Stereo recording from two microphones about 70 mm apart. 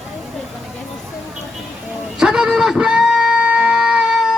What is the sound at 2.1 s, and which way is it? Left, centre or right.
Music, centre.